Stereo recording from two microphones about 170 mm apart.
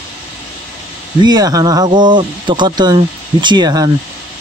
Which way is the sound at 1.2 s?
25° right (ahead or behind).